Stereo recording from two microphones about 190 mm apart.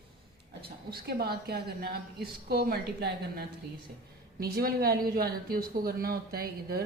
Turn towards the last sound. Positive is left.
turn(degrees=-55)  # may be behind; listen again after turning